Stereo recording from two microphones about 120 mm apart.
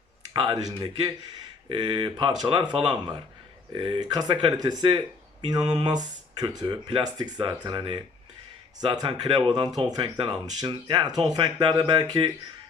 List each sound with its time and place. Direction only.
0.3 s speech: 30° right (ahead or behind)